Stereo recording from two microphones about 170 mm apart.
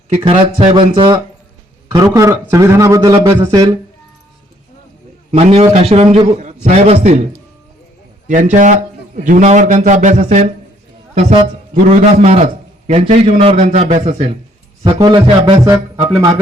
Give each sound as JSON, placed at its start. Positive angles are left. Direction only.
{"t": 0.2, "sound": "a man's voice", "side_deg": -35}
{"t": 5.3, "sound": "a man's voice", "side_deg": -35}
{"t": 8.3, "sound": "a man's voice", "side_deg": -50}
{"t": 14.9, "sound": "a man's voice", "side_deg": -25}